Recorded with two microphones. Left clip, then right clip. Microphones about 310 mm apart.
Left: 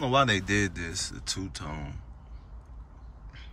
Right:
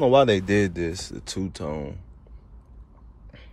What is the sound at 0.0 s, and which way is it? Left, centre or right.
Speech, centre.